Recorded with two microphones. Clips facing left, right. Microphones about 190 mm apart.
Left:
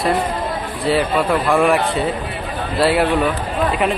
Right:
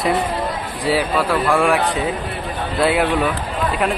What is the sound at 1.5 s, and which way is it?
Speech, centre (ahead or behind).